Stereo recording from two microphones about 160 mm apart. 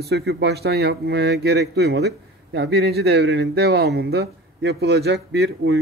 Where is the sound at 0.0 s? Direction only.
85° right.